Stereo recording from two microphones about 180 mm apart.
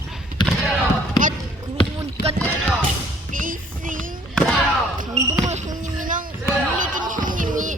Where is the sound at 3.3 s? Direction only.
50° right (ahead or behind).